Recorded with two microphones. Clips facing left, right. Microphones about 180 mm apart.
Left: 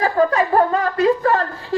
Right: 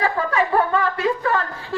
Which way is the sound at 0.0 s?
40° left (ahead or behind).